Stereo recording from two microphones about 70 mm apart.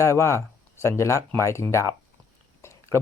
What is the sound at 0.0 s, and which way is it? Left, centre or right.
Speech, left.